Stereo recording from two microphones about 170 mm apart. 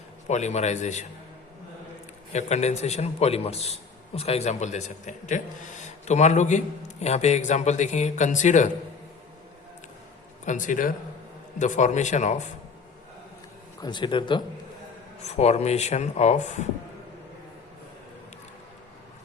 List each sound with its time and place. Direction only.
0.3 s a man's voice: 45° left (ahead or behind)
2.3 s a man's voice: 40° left (ahead or behind)
10.4 s a man's voice: 50° left (ahead or behind)
13.8 s speech: 25° left (ahead or behind)
15.2 s a man's voice: 40° left (ahead or behind)